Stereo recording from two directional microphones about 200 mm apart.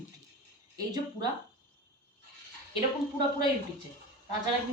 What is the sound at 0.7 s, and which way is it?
Speech, 20° right (ahead or behind).